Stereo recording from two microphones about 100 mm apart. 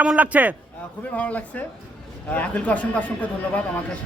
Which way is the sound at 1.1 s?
15° left (ahead or behind).